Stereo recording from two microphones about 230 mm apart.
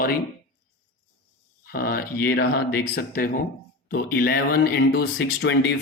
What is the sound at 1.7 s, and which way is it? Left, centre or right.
Speech, left.